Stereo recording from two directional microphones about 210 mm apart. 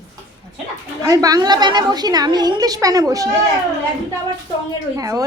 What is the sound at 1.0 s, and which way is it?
A woman's voice, 15° right (ahead or behind).